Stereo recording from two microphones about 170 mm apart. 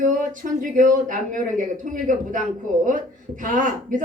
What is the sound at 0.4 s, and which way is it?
A woman's voice, 50° right (ahead or behind).